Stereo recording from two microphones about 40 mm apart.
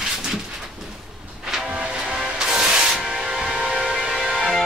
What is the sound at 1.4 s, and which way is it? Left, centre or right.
Vehicle, centre.